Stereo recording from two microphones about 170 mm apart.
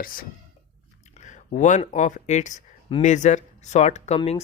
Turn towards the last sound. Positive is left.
turn(degrees=40)  # may be behind; listen again after turning